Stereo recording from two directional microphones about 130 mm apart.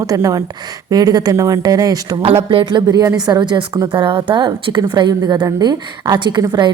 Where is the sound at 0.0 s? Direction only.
25° right (ahead or behind).